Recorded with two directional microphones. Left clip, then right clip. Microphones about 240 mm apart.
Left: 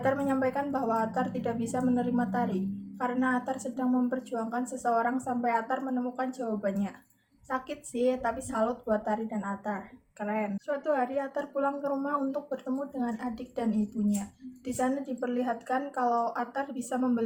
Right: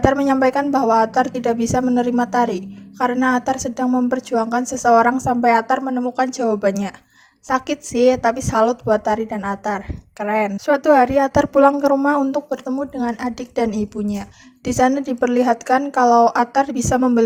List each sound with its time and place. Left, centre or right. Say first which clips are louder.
0.0 s a woman's voice: right 12 dB; right